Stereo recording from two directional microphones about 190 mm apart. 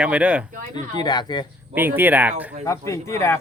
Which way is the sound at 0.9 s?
20° left (ahead or behind).